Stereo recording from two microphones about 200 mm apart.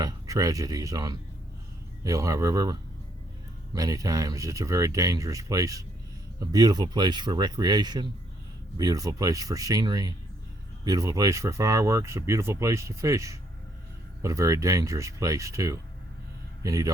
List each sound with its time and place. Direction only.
0.0 s speech: 15° right (ahead or behind)
3.8 s speech: 20° right (ahead or behind)